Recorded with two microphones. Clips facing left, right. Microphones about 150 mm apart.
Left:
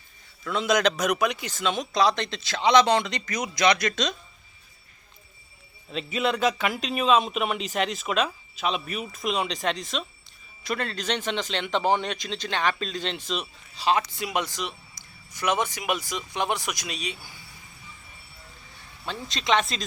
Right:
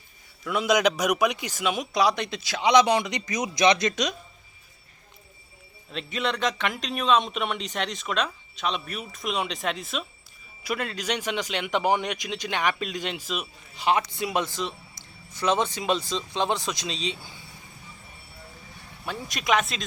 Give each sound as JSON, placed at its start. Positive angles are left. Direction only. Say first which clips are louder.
{"t": 0.4, "sound": "speech", "louder": "right 1 dB", "side_deg": -10}
{"t": 5.9, "sound": "speech", "louder": "left 3 dB", "side_deg": 5}
{"t": 13.7, "sound": "a man's voice", "louder": "even", "side_deg": -20}
{"t": 14.3, "sound": "speech", "louder": "right 1 dB", "side_deg": 15}
{"t": 14.9, "sound": "a sound", "louder": "right 2 dB", "side_deg": 15}
{"t": 15.9, "sound": "speech", "louder": "right 3 dB", "side_deg": 10}
{"t": 16.9, "sound": "a man's voice", "louder": "right 3 dB", "side_deg": -25}
{"t": 19.0, "sound": "speech", "louder": "even", "side_deg": -15}
{"t": 19.5, "sound": "speech", "louder": "left 1 dB", "side_deg": -5}